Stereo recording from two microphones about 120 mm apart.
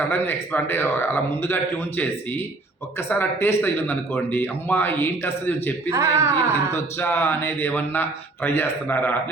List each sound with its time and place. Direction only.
0.1 s speech: 15° left (ahead or behind)
5.9 s speech: 25° right (ahead or behind)
6.7 s speech: 20° left (ahead or behind)